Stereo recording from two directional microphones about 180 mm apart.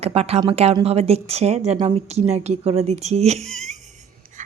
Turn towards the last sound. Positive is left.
turn(degrees=-40)  # may be behind; listen again after turning